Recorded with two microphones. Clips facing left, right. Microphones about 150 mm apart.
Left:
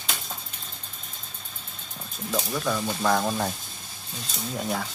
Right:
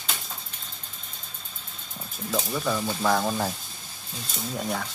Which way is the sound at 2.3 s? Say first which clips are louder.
Even; 5° right (ahead or behind).